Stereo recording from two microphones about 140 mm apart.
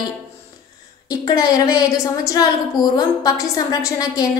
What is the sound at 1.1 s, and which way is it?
A woman's voice, 30° left (ahead or behind).